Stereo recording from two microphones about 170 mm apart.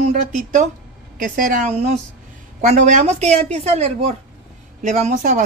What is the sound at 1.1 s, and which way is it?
A woman's voice, 50° right (ahead or behind).